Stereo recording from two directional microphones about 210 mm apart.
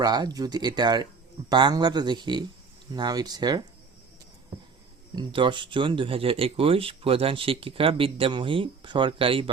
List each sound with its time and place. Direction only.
0.0 s speech: 20° right (ahead or behind)
5.1 s speech: 25° right (ahead or behind)